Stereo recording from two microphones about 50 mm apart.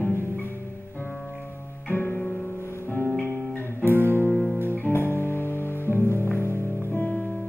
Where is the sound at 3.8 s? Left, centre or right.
Right.